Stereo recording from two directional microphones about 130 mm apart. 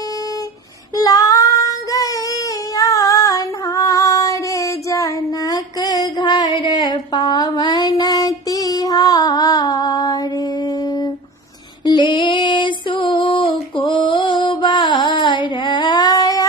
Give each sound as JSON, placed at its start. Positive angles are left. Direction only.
{"t": 0.9, "sound": "child singing", "side_deg": 30}
{"t": 11.8, "sound": "female singing", "side_deg": 35}